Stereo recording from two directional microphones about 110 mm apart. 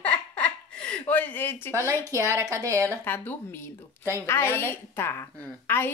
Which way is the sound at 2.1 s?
25° right (ahead or behind).